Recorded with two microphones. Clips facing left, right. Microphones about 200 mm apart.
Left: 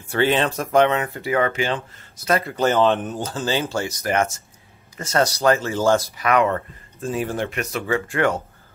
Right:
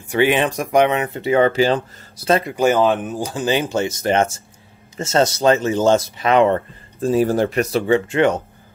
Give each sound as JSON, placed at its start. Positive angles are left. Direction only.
{"t": 0.0, "sound": "speech", "side_deg": -15}
{"t": 2.5, "sound": "speech", "side_deg": -10}